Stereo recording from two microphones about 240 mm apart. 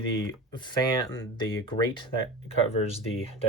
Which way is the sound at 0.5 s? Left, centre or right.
Centre.